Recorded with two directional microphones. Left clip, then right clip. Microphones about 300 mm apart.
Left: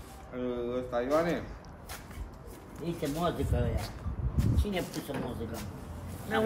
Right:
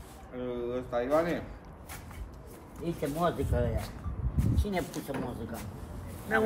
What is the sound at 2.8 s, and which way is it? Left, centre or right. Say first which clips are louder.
Speech: right 2 dB; centre.